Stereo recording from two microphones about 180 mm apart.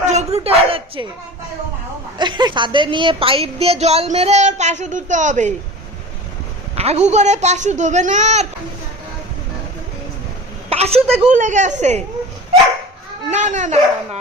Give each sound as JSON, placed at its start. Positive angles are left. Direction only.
{"t": 0.0, "sound": "a sound", "side_deg": -40}
{"t": 2.1, "sound": "a woman's voice", "side_deg": -25}
{"t": 6.7, "sound": "a woman's voice", "side_deg": -35}
{"t": 10.7, "sound": "a woman's voice", "side_deg": -35}
{"t": 13.3, "sound": "a woman's voice", "side_deg": -40}